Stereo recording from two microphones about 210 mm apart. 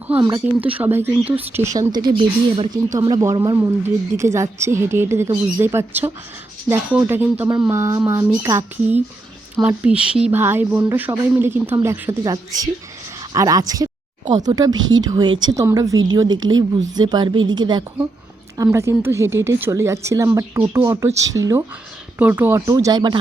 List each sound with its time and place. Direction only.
0.2 s a woman's voice: 20° right (ahead or behind)